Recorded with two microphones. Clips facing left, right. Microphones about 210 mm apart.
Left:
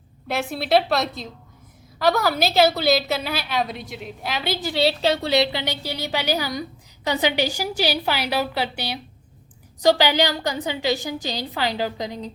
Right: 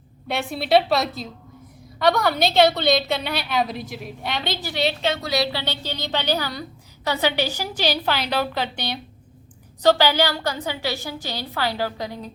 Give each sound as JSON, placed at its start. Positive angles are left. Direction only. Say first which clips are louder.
{"t": 0.3, "sound": "a woman's voice", "louder": "even", "side_deg": 0}
{"t": 4.8, "sound": "a woman's voice", "louder": "left 3 dB", "side_deg": 35}